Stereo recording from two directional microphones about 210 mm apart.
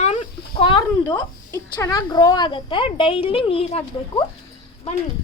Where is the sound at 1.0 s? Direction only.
15° left (ahead or behind).